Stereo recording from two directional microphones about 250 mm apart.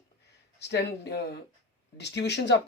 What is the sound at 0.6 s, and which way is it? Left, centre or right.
Speech, left.